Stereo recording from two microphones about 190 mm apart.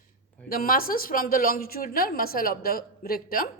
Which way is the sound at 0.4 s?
50° left (ahead or behind).